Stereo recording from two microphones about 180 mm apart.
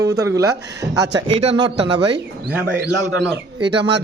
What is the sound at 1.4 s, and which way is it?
Speech, 30° right (ahead or behind).